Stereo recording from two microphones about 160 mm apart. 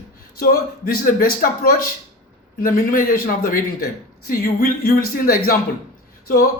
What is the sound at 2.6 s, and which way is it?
A man's voice, 60° left (ahead or behind).